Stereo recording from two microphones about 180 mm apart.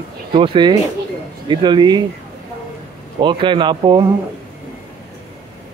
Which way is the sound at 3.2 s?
25° right (ahead or behind).